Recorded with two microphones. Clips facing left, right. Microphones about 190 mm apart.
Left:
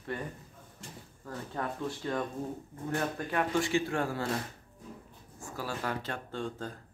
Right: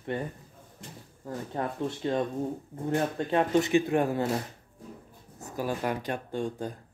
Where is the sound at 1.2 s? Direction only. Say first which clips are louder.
Right 4 dB; 25° right (ahead or behind).